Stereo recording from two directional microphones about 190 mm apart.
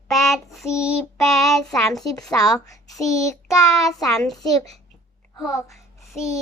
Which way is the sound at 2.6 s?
15° left (ahead or behind).